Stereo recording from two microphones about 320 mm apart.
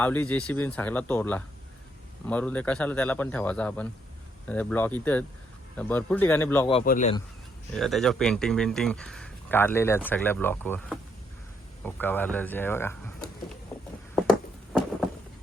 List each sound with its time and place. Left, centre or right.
0.0 s speech: centre
6.7 s speech: left
7.7 s speech: centre
14.2 s walk: centre